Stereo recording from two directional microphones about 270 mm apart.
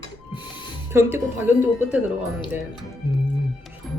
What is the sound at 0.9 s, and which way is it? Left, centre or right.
Speech, centre.